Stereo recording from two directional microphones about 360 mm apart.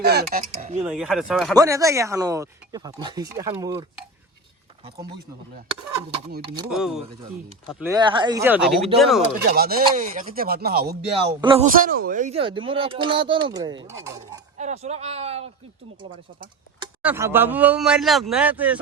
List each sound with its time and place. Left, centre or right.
0.0 s speech: right
0.8 s speech: centre
6.7 s speech: centre
9.4 s speech: right
11.2 s speech: centre
16.8 s speech: centre